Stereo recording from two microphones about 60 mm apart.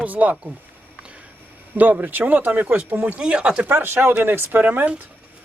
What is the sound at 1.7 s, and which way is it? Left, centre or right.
Speech, right.